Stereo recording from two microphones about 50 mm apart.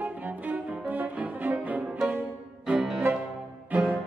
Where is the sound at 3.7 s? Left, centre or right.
Right.